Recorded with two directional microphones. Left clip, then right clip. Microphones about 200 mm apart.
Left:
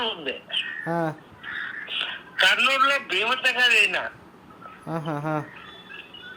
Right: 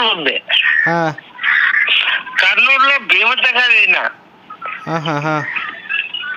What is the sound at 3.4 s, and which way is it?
Speech, 45° right (ahead or behind).